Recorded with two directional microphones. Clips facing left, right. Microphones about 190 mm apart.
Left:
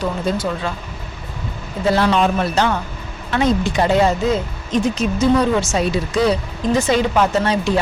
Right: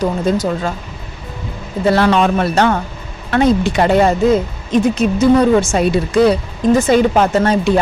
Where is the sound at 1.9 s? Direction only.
60° right (ahead or behind).